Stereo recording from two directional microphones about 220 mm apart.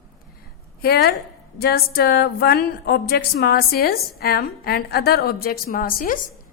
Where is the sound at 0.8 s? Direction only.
50° left (ahead or behind).